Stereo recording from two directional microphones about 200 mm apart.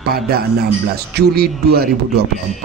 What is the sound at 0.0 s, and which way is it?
Speech, 50° right (ahead or behind).